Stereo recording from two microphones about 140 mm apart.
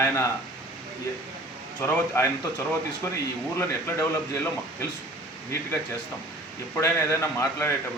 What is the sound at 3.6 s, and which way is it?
Speech, 20° left (ahead or behind).